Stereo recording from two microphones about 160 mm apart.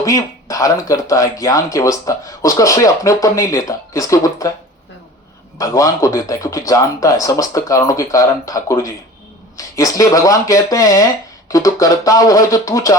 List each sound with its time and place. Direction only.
0.0 s speech: 20° left (ahead or behind)
5.5 s speech: 20° left (ahead or behind)